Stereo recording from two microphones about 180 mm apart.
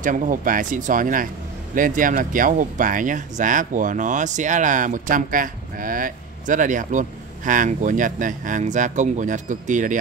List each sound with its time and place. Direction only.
0.0 s speech: 45° right (ahead or behind)